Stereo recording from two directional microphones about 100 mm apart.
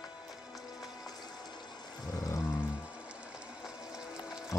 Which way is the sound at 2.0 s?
35° left (ahead or behind).